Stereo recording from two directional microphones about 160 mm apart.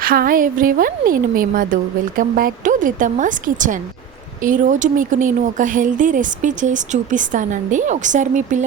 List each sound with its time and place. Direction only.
0.0 s speech: 65° right (ahead or behind); by 8.6 s 50° right (ahead or behind)